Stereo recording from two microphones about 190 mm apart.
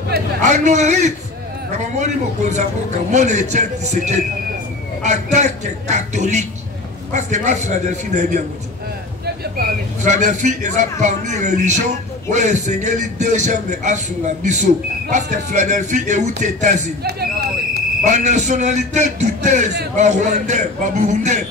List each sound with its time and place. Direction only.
0.4 s a man's voice: 40° right (ahead or behind)
10.0 s a man's voice: 40° right (ahead or behind)
17.0 s a sound: 55° right (ahead or behind)
18.0 s a man's voice: 40° right (ahead or behind)